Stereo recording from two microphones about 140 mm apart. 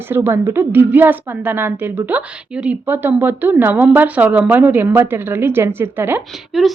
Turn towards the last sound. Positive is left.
turn(degrees=0)  # may be behind; listen again after turning